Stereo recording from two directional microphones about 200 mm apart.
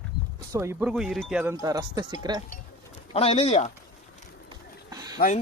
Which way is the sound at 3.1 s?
30° left (ahead or behind).